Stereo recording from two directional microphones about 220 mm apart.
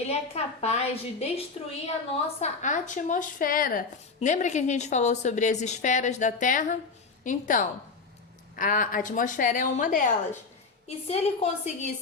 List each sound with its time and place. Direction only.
0.0 s a woman's voice: 30° left (ahead or behind)